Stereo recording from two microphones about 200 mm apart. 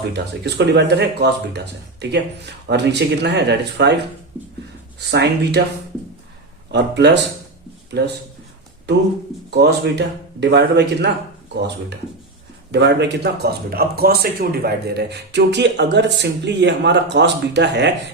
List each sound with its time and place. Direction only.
0.1 s speech: 60° right (ahead or behind)
6.7 s speech: 60° right (ahead or behind)
12.7 s speech: 60° right (ahead or behind)